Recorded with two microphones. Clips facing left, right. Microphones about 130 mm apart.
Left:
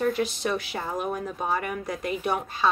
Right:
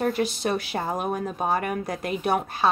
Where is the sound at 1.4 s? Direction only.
45° right (ahead or behind).